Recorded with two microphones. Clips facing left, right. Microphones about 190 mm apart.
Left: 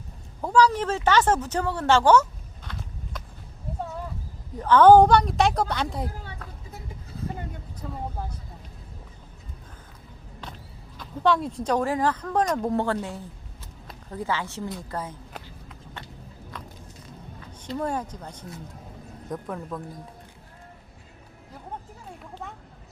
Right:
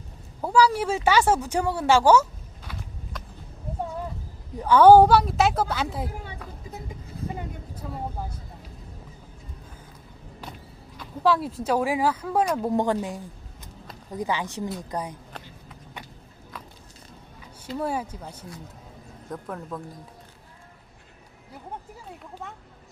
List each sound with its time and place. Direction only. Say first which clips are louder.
0.4 s speech: even; 10° right (ahead or behind)
2.6 s a sound: left 1 dB; centre (ahead or behind)
4.5 s speech: right 1 dB; 10° right (ahead or behind)
7.8 s speech: even; 10° right (ahead or behind)
10.9 s speech: even; 5° right (ahead or behind)
16.0 s walk: right 1 dB; 15° right (ahead or behind)
17.7 s speech: even; 5° right (ahead or behind)